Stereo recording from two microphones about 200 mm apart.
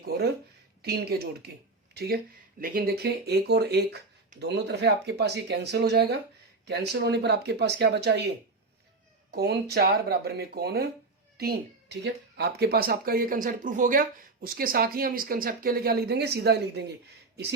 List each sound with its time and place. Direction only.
0.0 s speech: 55° right (ahead or behind)
9.3 s speech: 50° right (ahead or behind)